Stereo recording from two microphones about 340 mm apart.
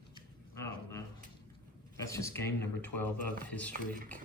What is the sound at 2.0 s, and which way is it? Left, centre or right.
Speech, centre.